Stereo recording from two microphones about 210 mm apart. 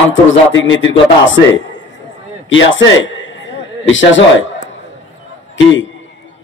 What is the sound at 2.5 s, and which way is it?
A man's voice, 65° left (ahead or behind).